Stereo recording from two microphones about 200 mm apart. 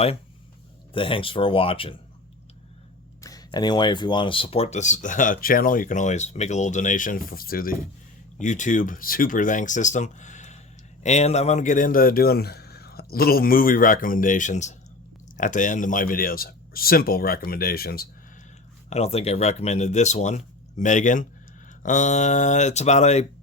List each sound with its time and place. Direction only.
0.9 s speech: 25° left (ahead or behind)
3.2 s a man's voice: 15° left (ahead or behind); by 18.1 s 50° left (ahead or behind)
18.9 s speech: 30° left (ahead or behind)